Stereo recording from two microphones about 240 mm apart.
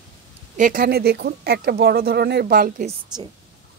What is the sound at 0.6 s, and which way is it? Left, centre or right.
Speech, right.